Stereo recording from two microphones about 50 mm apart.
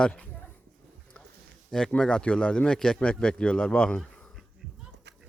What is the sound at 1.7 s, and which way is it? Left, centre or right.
Speech, centre.